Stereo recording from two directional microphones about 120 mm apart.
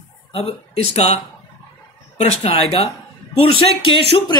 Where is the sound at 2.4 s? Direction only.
60° left (ahead or behind).